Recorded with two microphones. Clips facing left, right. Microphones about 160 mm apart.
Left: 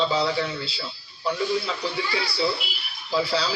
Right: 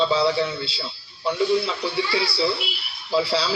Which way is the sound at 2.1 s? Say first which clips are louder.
Right 1 dB; 30° right (ahead or behind).